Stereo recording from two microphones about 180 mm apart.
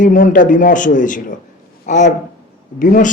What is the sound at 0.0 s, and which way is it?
A man's voice, 45° left (ahead or behind).